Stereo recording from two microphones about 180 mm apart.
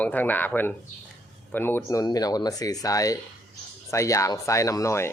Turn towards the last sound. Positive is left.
turn(degrees=15)  # may be behind; listen again after turning